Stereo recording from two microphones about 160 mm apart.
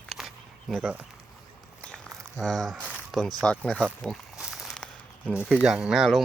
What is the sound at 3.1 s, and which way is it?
Zipper, centre (ahead or behind).